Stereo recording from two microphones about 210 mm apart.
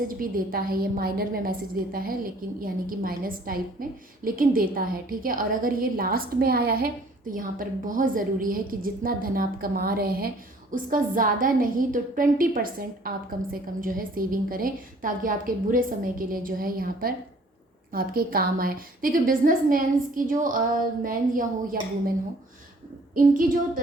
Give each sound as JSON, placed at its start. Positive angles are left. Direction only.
{"t": 0.1, "sound": "a woman's voice", "side_deg": -40}
{"t": 23.1, "sound": "a woman's voice", "side_deg": -40}